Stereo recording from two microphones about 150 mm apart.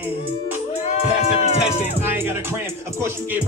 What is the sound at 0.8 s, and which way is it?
Music, 45° left (ahead or behind).